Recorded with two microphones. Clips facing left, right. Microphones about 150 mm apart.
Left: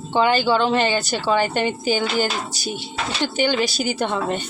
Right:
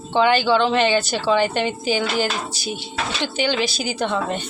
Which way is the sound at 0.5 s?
45° left (ahead or behind).